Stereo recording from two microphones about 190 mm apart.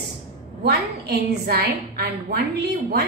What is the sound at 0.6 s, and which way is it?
A woman's voice, 55° right (ahead or behind).